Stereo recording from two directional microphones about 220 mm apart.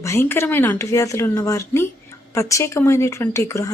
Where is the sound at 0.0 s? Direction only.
10° left (ahead or behind).